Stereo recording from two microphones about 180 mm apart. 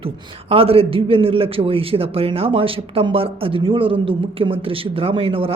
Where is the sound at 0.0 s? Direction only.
30° right (ahead or behind).